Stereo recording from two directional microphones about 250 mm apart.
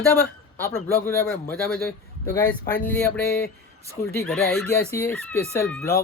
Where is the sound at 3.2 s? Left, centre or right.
Left.